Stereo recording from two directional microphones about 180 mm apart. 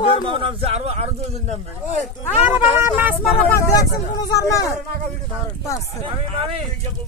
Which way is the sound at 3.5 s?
15° left (ahead or behind).